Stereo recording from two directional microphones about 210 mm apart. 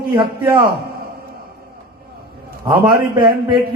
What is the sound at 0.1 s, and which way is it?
Speech, 20° right (ahead or behind).